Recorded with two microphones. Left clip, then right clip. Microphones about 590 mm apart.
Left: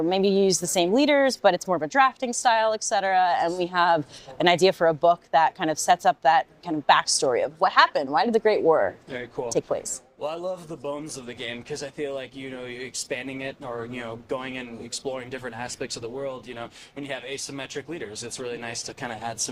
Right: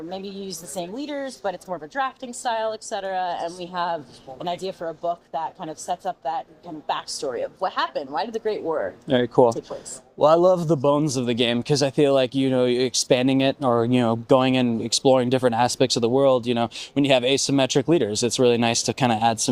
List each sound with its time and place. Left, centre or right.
0.1 s a woman's voice: left
6.8 s a woman's voice: left
10.2 s a man's voice: right